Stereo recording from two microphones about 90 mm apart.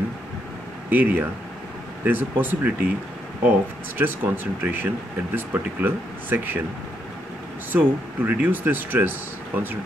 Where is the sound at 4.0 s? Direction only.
20° right (ahead or behind).